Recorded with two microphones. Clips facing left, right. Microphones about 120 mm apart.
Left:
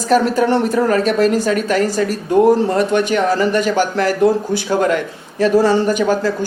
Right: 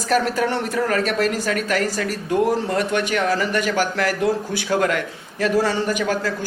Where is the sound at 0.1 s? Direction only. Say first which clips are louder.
Left 6 dB; 30° left (ahead or behind).